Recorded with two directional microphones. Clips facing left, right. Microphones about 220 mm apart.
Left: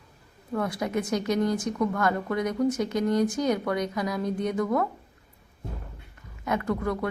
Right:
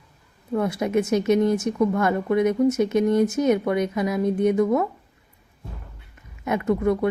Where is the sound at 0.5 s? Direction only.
25° right (ahead or behind).